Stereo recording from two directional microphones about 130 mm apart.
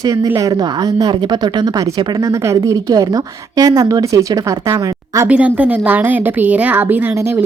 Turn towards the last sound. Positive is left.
turn(degrees=-20)  # may be behind; listen again after turning